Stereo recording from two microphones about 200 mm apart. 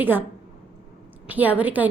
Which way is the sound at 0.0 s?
10° right (ahead or behind).